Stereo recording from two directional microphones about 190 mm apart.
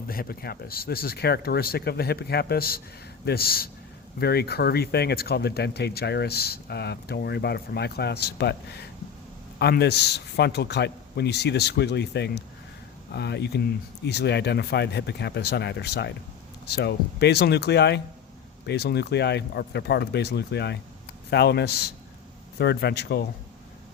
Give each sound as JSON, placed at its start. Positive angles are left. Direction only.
{"t": 0.1, "sound": "a man's voice", "side_deg": 50}